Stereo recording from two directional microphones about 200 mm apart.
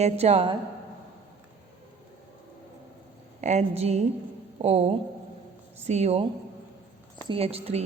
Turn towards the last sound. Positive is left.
turn(degrees=-30)  # may be behind; listen again after turning